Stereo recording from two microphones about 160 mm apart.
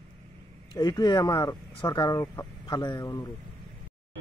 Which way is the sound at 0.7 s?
20° left (ahead or behind).